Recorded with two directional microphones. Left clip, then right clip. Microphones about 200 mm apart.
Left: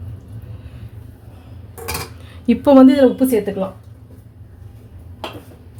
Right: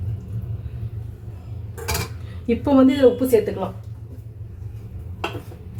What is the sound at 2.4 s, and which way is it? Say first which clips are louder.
Speech: left 7 dB; 55° left (ahead or behind).